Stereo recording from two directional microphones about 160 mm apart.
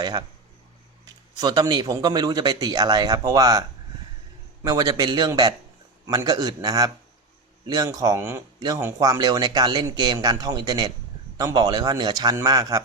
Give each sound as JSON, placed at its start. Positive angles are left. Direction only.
{"t": 0.0, "sound": "speech", "side_deg": -25}
{"t": 1.4, "sound": "speech", "side_deg": -25}
{"t": 4.6, "sound": "speech", "side_deg": -20}